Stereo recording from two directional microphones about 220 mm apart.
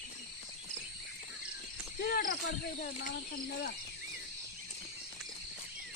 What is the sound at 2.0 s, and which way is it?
Cricket, 40° left (ahead or behind).